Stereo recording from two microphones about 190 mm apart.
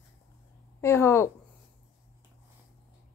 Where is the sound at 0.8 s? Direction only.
15° left (ahead or behind).